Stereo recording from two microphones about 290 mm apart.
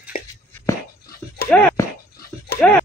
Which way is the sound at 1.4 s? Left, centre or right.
Centre.